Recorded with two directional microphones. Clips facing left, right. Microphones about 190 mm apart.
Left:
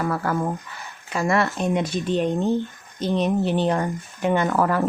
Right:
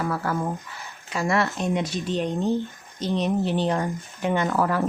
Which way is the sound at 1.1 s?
50° left (ahead or behind).